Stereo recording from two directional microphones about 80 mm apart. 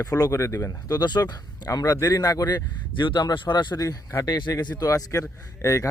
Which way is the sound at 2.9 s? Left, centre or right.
Left.